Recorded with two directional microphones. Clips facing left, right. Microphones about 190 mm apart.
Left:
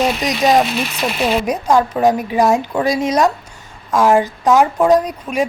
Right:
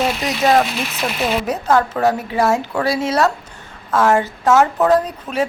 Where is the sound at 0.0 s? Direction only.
15° left (ahead or behind).